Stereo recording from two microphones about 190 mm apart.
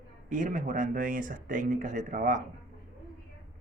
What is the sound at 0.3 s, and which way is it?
Speech, 40° right (ahead or behind).